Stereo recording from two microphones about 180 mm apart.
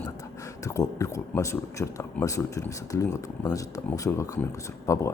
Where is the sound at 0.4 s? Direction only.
20° left (ahead or behind).